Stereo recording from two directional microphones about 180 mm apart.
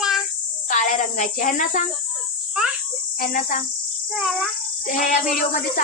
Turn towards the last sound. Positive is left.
turn(degrees=50)  # may be behind; listen again after turning